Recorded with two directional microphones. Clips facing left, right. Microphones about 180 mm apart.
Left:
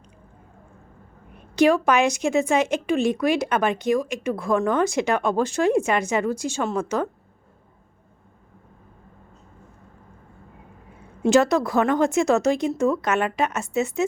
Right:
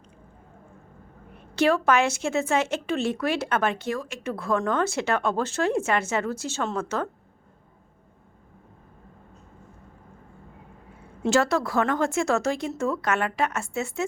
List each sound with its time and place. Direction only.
1.5 s a woman's voice: 15° left (ahead or behind)
11.2 s a woman's voice: 15° left (ahead or behind)